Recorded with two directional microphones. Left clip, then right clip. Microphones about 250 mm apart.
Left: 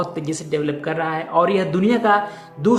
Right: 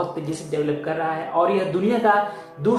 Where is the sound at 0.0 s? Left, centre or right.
Left.